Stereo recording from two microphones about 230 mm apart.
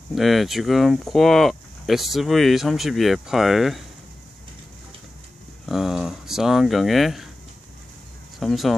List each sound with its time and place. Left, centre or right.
0.1 s speech: centre
5.7 s speech: centre
8.4 s speech: centre